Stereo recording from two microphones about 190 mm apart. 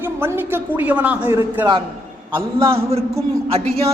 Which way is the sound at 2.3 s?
30° right (ahead or behind).